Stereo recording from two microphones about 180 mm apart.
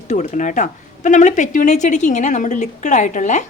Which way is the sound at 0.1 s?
45° left (ahead or behind).